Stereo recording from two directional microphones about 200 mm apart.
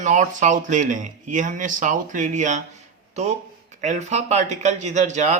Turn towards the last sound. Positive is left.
turn(degrees=-35)  # may be behind; listen again after turning